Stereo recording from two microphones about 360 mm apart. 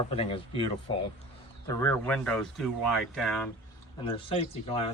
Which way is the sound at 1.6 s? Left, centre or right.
Centre.